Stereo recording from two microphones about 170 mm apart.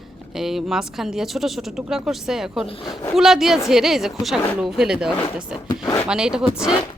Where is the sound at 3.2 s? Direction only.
Centre (ahead or behind).